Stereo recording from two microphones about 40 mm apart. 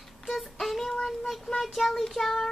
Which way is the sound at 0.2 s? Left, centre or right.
Centre.